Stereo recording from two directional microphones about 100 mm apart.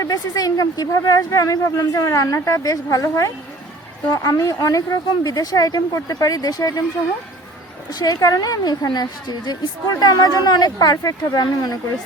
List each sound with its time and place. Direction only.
0.0 s speech: 40° left (ahead or behind)
7.9 s speech: 40° left (ahead or behind)